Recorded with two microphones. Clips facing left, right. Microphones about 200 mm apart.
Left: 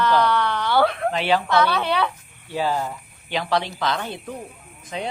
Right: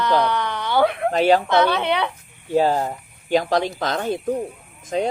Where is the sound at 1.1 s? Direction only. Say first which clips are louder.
Right 5 dB; 45° right (ahead or behind).